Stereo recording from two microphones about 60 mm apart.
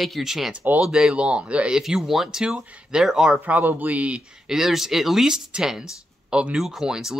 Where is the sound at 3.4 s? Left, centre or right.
Right.